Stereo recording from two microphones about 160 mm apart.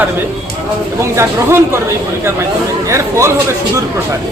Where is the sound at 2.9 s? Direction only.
15° right (ahead or behind).